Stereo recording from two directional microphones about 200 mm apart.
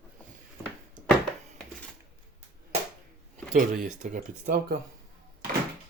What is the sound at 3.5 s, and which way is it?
Speech, 40° right (ahead or behind).